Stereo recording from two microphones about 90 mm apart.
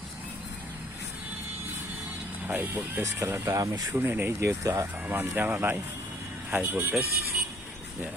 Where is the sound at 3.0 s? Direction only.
35° right (ahead or behind).